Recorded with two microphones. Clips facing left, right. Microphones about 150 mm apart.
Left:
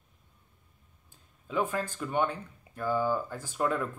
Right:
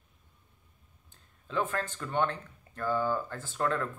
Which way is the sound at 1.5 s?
10° left (ahead or behind).